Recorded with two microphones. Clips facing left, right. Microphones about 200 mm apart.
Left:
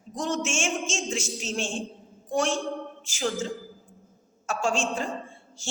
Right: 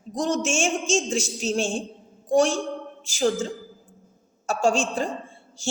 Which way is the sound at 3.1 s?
35° right (ahead or behind).